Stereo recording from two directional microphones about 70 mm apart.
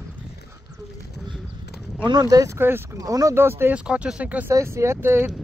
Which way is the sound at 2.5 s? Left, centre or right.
Right.